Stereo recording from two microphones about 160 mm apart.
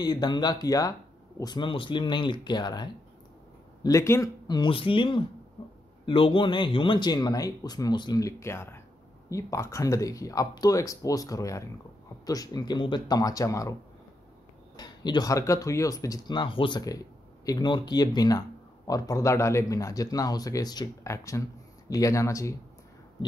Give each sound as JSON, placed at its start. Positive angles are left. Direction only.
{"t": 0.0, "sound": "speech", "side_deg": 25}
{"t": 14.8, "sound": "speech", "side_deg": 25}